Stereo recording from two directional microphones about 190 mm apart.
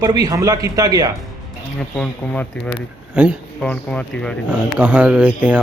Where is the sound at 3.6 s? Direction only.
5° left (ahead or behind).